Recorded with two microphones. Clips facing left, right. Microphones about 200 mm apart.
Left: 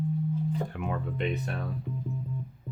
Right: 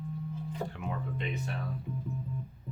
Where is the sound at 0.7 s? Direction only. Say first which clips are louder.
Left 4 dB; 60° left (ahead or behind).